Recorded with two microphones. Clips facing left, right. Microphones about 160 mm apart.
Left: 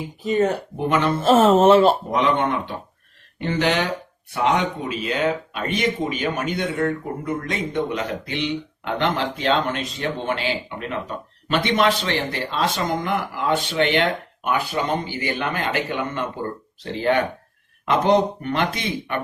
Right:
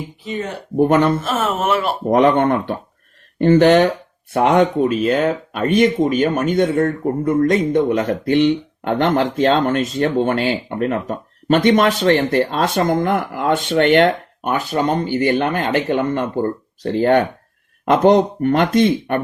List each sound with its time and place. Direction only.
0.8 s speech: 45° right (ahead or behind)
1.2 s speech: 30° left (ahead or behind)
2.0 s speech: 50° right (ahead or behind)